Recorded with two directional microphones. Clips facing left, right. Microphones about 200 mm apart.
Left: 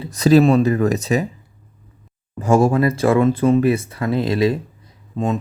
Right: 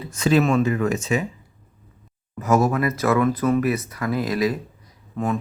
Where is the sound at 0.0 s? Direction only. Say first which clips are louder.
Left 6 dB; 35° left (ahead or behind).